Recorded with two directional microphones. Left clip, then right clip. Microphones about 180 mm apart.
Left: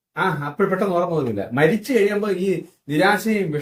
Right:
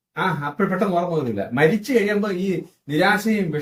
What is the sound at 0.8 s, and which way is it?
Speech, 20° left (ahead or behind).